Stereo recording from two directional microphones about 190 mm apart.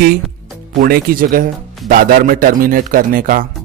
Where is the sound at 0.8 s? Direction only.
50° right (ahead or behind).